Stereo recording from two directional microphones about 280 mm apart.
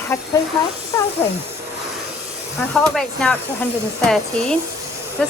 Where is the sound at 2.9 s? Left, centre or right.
Centre.